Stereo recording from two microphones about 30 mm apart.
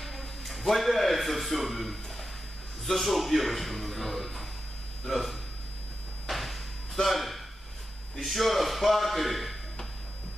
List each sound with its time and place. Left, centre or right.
0.0 s a man's voice: centre
6.2 s a sound: centre
8.2 s a man's voice: centre